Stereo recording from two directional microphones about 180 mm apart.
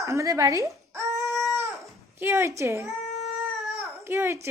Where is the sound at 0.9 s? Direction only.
15° right (ahead or behind).